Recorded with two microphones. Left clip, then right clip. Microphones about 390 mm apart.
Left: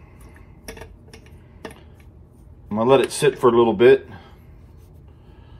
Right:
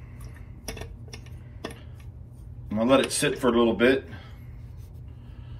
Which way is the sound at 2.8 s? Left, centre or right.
Centre.